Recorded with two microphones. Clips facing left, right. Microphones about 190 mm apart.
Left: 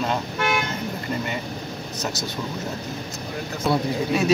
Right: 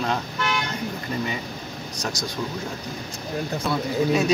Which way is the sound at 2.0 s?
5° left (ahead or behind).